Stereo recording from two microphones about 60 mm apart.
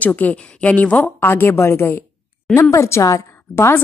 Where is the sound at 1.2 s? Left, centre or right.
Left.